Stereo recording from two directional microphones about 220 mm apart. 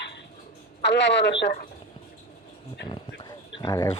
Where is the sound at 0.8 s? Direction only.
55° left (ahead or behind).